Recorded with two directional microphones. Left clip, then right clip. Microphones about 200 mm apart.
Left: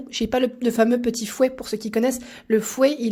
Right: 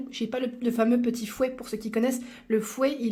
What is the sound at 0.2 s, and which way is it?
Speech, 30° left (ahead or behind).